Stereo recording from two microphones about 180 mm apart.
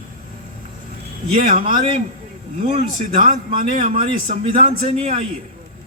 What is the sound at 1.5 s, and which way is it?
Speech, 45° right (ahead or behind).